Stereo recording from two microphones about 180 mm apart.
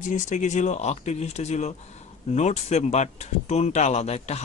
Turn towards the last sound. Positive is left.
turn(degrees=35)  # may be behind; listen again after turning